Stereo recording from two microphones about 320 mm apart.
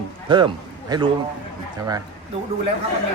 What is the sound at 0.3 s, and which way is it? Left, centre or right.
Speech, centre.